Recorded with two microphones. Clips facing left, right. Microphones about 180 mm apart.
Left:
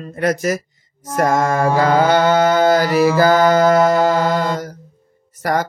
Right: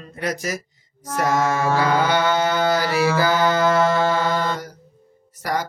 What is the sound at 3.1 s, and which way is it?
Mantra, 45° left (ahead or behind).